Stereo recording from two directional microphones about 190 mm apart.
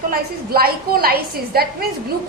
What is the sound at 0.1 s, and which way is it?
A woman's voice, 50° right (ahead or behind).